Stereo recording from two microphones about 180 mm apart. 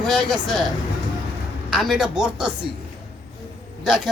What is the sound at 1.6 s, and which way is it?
A woman's voice, centre (ahead or behind).